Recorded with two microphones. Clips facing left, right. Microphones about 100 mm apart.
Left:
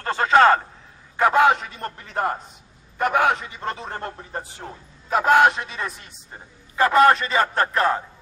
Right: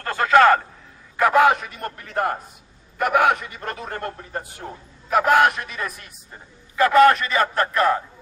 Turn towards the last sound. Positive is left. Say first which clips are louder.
# right 1 dB
turn(degrees=30)  # may be behind; listen again after turning